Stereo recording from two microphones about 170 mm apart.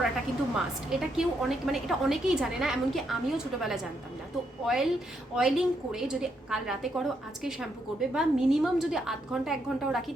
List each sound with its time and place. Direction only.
0.5 s a woman's voice: centre (ahead or behind)